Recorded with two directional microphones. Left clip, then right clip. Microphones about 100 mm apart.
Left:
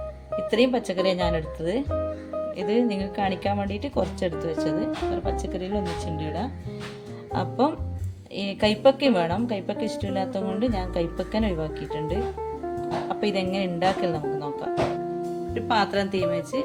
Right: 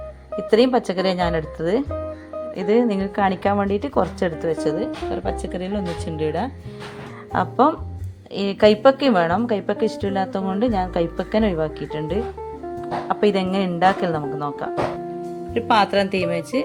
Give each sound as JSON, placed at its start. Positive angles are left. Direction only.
{"t": 0.3, "sound": "a woman's voice", "side_deg": -35}
{"t": 4.6, "sound": "a woman's voice", "side_deg": -45}
{"t": 10.7, "sound": "a woman's voice", "side_deg": -40}
{"t": 15.5, "sound": "speech", "side_deg": -90}